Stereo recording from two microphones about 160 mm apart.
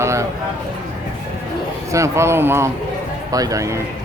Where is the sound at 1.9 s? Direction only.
15° right (ahead or behind).